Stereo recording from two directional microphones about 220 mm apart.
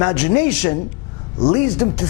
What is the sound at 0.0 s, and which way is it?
Speech, 25° left (ahead or behind).